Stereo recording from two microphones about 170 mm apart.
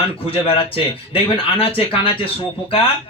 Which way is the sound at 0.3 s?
35° left (ahead or behind).